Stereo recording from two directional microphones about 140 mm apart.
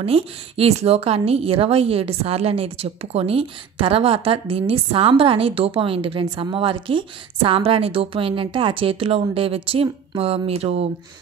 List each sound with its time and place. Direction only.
0.0 s a woman's voice: 45° right (ahead or behind)